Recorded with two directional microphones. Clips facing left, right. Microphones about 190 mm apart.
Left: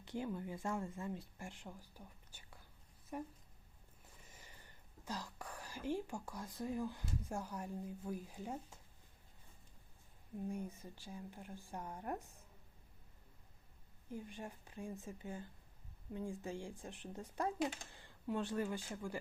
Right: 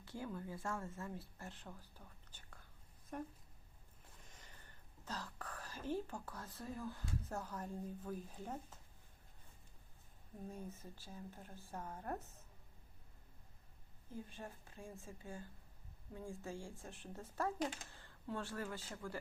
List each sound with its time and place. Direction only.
0.0 s speech: 15° left (ahead or behind)
4.3 s whispering: 10° left (ahead or behind)
7.0 s speech: 10° left (ahead or behind)
10.5 s speech: 15° left (ahead or behind)
14.1 s speech: 15° left (ahead or behind)